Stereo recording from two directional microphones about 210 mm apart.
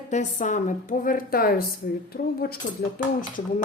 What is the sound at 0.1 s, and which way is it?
A woman's voice, 35° left (ahead or behind).